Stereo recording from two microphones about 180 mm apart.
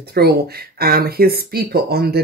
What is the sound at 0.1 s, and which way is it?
Speech, 60° right (ahead or behind).